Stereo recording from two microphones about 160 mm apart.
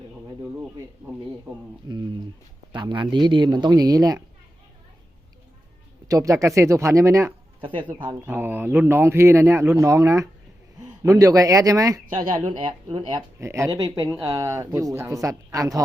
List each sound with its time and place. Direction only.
1.9 s speech: 25° right (ahead or behind)
6.1 s speech: 20° right (ahead or behind)
7.6 s speech: 30° right (ahead or behind)
8.3 s a man's voice: 15° right (ahead or behind)
12.1 s speech: 35° right (ahead or behind)
13.4 s speech: 15° right (ahead or behind)